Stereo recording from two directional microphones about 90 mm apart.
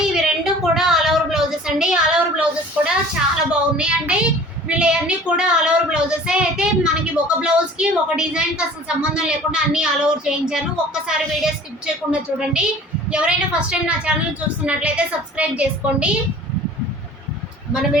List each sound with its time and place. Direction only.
0.0 s child singing: 5° right (ahead or behind)
3.5 s a sound: 10° right (ahead or behind)
4.7 s speech: 10° right (ahead or behind)